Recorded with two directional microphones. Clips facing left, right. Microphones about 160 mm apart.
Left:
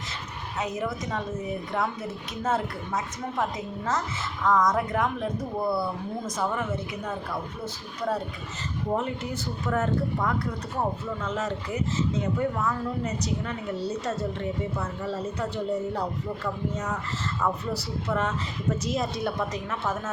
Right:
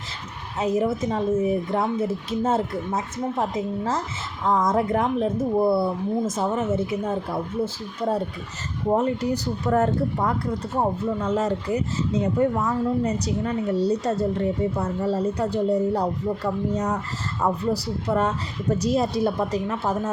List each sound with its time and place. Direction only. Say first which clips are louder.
0.6 s speech: right 8 dB; 30° right (ahead or behind)